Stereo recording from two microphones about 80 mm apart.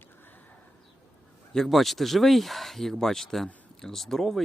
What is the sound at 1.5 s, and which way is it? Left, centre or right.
Speech, centre.